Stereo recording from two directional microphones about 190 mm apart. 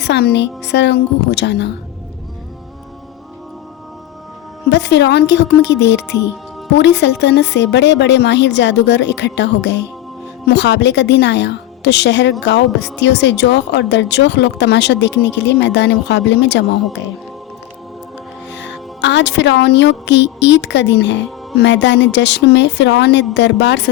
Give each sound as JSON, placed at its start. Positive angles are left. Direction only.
{"t": 0.0, "sound": "speech", "side_deg": 60}
{"t": 4.7, "sound": "speech", "side_deg": 65}
{"t": 18.5, "sound": "a woman's voice", "side_deg": 70}